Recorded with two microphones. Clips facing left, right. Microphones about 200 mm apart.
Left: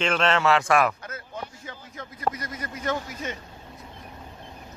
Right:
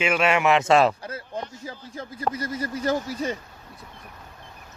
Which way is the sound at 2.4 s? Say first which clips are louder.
Right 7 dB; 30° right (ahead or behind).